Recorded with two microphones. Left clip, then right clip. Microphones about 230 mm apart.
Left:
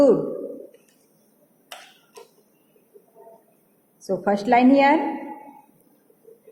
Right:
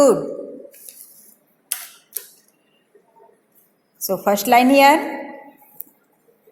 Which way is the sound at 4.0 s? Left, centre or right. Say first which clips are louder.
Right 4 dB; right.